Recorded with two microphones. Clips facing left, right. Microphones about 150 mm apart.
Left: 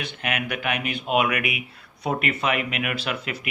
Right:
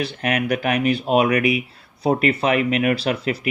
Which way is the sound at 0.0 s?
35° right (ahead or behind).